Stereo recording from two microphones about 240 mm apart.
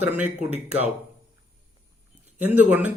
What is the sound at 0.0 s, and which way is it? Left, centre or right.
Speech, centre.